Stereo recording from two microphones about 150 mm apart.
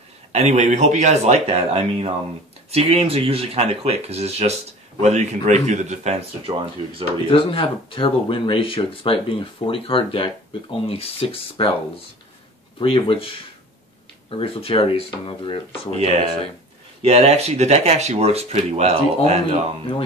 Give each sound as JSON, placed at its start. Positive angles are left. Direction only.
{"t": 0.3, "sound": "speech", "side_deg": -50}
{"t": 6.4, "sound": "speech", "side_deg": -35}
{"t": 7.3, "sound": "speech", "side_deg": 35}
{"t": 12.7, "sound": "speech", "side_deg": 35}
{"t": 15.9, "sound": "speech", "side_deg": -45}